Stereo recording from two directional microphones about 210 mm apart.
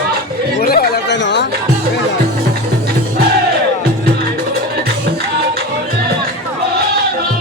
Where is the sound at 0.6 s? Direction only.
45° left (ahead or behind).